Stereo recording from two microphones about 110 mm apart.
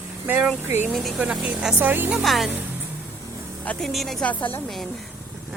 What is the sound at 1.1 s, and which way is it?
Speech, 10° right (ahead or behind).